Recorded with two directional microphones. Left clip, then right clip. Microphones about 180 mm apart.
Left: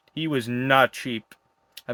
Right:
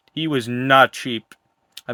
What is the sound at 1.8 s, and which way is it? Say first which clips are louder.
Tick-tock: right 3 dB; 25° right (ahead or behind).